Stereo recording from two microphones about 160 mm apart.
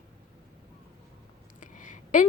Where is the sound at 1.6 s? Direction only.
55° left (ahead or behind).